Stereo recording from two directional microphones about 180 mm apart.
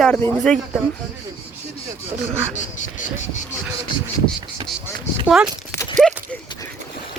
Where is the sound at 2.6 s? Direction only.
45° left (ahead or behind).